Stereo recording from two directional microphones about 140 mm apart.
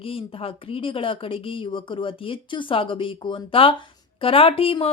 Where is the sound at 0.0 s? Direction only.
40° left (ahead or behind).